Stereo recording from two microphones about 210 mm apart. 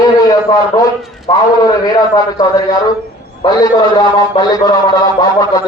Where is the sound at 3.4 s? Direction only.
20° left (ahead or behind).